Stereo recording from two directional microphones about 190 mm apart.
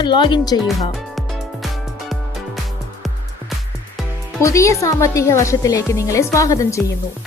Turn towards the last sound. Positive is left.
turn(degrees=15)  # may be behind; listen again after turning